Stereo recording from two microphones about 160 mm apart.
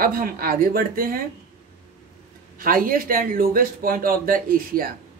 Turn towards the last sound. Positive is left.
turn(degrees=-65)  # may be behind; listen again after turning